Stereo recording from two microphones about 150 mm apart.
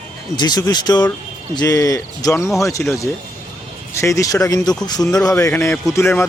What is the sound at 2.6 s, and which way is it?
A man's voice, 20° left (ahead or behind).